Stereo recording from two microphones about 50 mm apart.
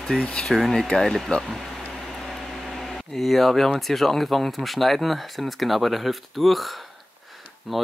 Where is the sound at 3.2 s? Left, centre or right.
Centre.